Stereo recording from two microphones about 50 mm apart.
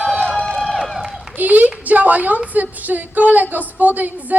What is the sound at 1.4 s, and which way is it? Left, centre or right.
A woman's voice, right.